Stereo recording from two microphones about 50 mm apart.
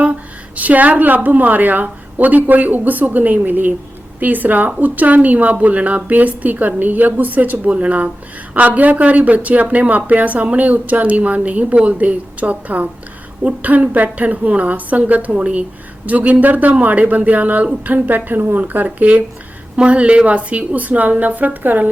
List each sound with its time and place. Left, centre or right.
0.0 s a woman's voice: right